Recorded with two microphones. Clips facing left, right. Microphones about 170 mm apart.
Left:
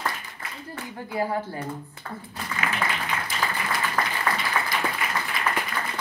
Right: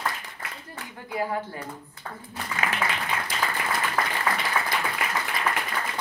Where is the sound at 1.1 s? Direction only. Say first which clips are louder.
Left 2 dB; 30° left (ahead or behind).